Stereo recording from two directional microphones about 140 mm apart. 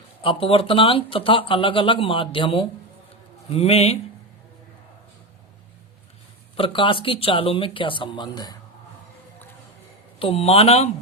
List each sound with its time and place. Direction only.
0.2 s speech: 40° left (ahead or behind)
3.5 s speech: 50° left (ahead or behind)
6.6 s speech: 35° left (ahead or behind)
10.2 s speech: 45° left (ahead or behind)